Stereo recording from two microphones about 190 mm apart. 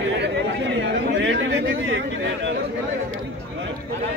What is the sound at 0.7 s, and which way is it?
Chatter, 75° right (ahead or behind).